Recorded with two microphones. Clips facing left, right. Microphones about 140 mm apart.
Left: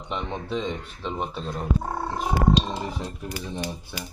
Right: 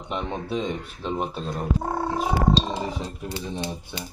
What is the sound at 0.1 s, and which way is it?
Speech, 5° right (ahead or behind).